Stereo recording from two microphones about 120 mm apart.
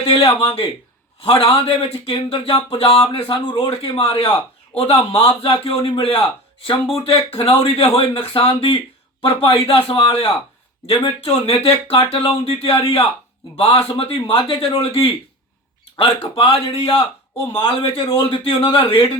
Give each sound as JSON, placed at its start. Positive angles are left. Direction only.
{"t": 0.1, "sound": "a man's voice", "side_deg": 50}